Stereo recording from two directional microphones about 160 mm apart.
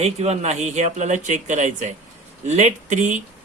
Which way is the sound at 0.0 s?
40° right (ahead or behind).